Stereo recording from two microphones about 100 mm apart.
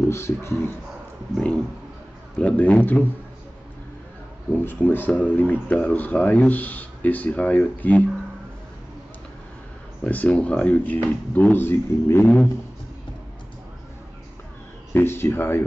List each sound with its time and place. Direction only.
0.1 s speech: 25° left (ahead or behind)
1.3 s speech: 10° left (ahead or behind)
4.6 s speech: 20° left (ahead or behind)
10.0 s speech: 15° left (ahead or behind)
15.0 s speech: 25° left (ahead or behind)